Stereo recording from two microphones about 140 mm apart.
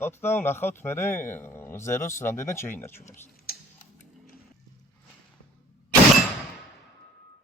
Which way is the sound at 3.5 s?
90° left.